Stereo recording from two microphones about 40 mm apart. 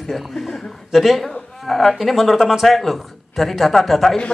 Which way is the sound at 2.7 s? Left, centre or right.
Centre.